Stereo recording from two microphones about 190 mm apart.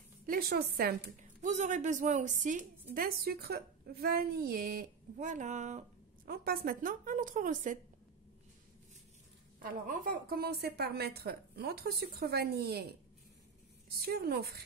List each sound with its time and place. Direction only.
0.3 s a woman's voice: 55° right (ahead or behind)
9.6 s a woman's voice: 50° right (ahead or behind)
14.0 s a woman's voice: 55° right (ahead or behind)